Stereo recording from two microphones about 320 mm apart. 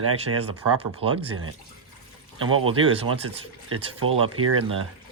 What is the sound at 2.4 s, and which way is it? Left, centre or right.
Speech, centre.